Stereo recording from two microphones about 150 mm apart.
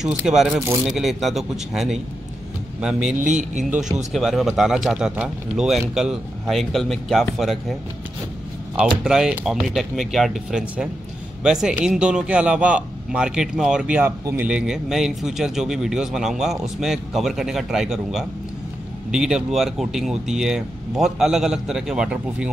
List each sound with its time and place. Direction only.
0.0 s a man's voice: 5° right (ahead or behind)
3.2 s a man's voice: 55° right (ahead or behind)
4.1 s a man's voice: centre (ahead or behind)
8.7 s a man's voice: 5° right (ahead or behind)